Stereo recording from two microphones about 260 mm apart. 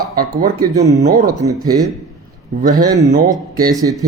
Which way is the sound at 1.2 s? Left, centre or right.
Centre.